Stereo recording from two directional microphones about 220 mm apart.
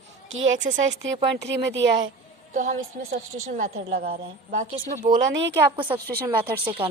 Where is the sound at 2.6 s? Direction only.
40° right (ahead or behind).